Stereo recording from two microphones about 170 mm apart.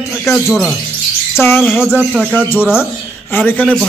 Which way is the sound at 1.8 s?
5° right (ahead or behind).